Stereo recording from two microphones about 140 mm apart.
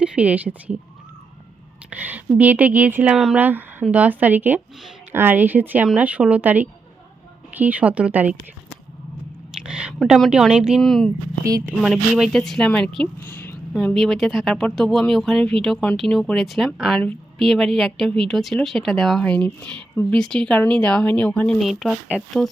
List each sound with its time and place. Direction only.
0.0 s a woman's voice: 10° right (ahead or behind)
1.9 s a woman's voice: 10° right (ahead or behind)
9.6 s a sound: 5° right (ahead or behind)
10.0 s speech: centre (ahead or behind)
11.4 s speech: 25° right (ahead or behind)
11.8 s speech: 5° right (ahead or behind)
13.2 s a sound: 15° left (ahead or behind)
13.7 s speech: 5° left (ahead or behind)
17.0 s a woman's voice: 10° left (ahead or behind)